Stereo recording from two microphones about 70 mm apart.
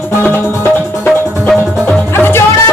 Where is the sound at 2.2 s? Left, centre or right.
Left.